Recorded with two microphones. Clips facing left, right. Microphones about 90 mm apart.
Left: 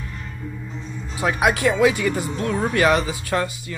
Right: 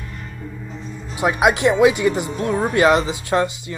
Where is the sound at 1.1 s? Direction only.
20° right (ahead or behind).